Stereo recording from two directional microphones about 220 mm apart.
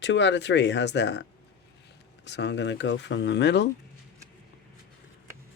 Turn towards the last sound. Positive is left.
turn(degrees=50)  # may be behind; listen again after turning